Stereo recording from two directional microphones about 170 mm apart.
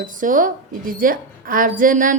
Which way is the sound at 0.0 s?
50° right (ahead or behind).